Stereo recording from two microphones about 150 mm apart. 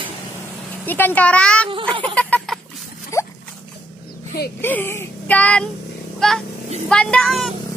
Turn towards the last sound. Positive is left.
turn(degrees=0)  # may be behind; listen again after turning